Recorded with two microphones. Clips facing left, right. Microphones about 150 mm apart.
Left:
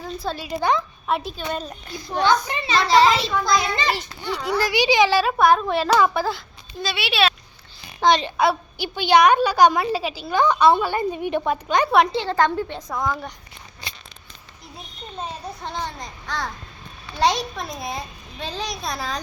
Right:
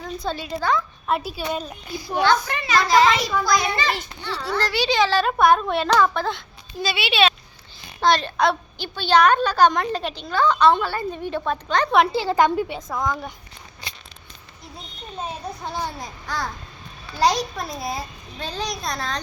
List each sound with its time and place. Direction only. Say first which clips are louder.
0.0 s a woman's voice: even; centre (ahead or behind)
2.2 s speech: even; 15° left (ahead or behind)
2.6 s a child's voice: left 1 dB; 30° left (ahead or behind); by 7.3 s centre (ahead or behind)
8.0 s speech: left 1 dB; 15° left (ahead or behind)
11.9 s a woman's voice: right 2 dB; 5° right (ahead or behind)
15.6 s a child's voice: right 1 dB; 5° right (ahead or behind)